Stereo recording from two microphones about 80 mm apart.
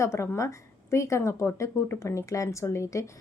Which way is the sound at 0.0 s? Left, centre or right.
Left.